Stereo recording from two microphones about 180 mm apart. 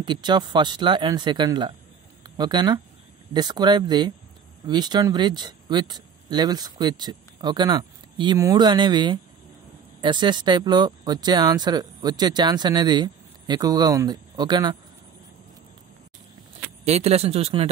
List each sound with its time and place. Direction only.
0.0 s speech: 25° right (ahead or behind)
16.8 s speech: 35° right (ahead or behind)